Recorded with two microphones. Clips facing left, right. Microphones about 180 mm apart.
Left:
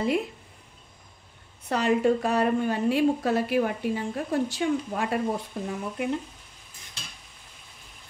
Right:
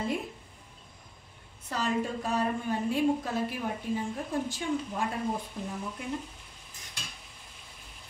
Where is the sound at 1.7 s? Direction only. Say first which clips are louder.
Left 8 dB; 70° left (ahead or behind).